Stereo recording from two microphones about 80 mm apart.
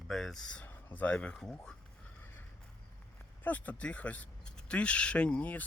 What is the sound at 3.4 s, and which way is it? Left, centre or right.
Speech, centre.